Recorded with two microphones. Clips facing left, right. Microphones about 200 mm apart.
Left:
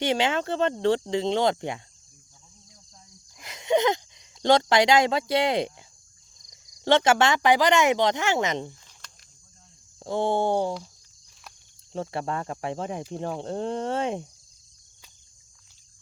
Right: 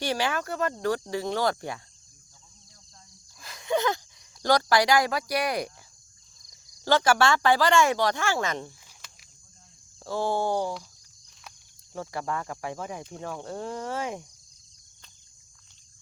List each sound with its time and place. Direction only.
0.0 s speech: 20° left (ahead or behind)
3.3 s a sound: 20° left (ahead or behind)
6.4 s speech: 20° left (ahead or behind)
9.0 s a sound: 5° right (ahead or behind)
10.0 s speech: 20° left (ahead or behind)
11.9 s speech: 25° left (ahead or behind)